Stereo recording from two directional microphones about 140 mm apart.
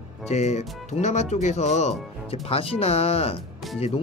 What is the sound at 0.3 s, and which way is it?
Speech, 55° left (ahead or behind).